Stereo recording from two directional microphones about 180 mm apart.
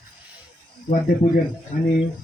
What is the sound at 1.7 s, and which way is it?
Speech, 45° left (ahead or behind).